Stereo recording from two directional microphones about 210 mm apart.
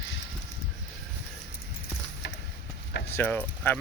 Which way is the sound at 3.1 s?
10° left (ahead or behind).